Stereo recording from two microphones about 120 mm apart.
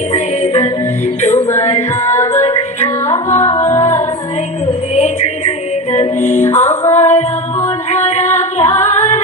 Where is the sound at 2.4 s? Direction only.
65° left (ahead or behind).